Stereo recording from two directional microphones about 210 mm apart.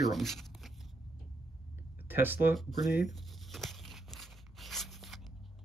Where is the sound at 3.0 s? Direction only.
Centre (ahead or behind).